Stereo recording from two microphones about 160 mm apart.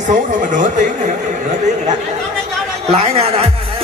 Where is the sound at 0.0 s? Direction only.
55° right (ahead or behind).